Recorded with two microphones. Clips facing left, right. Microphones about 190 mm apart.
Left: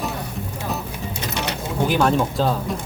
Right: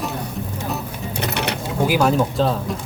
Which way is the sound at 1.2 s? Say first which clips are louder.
Right 3 dB; 65° right (ahead or behind).